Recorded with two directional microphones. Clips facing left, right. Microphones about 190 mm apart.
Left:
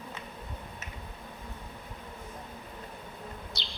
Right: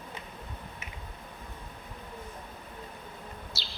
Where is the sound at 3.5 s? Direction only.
5° right (ahead or behind).